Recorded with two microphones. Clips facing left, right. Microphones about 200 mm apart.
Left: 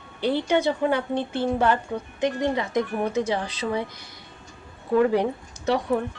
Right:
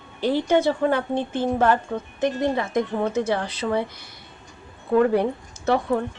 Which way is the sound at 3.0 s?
15° left (ahead or behind).